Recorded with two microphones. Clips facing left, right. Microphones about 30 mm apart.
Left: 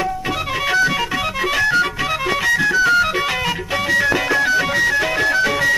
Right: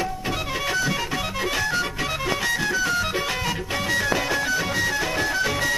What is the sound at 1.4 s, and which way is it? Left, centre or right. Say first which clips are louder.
Music: left 8 dB; left.